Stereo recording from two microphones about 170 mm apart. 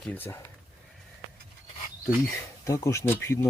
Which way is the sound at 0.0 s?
10° left (ahead or behind).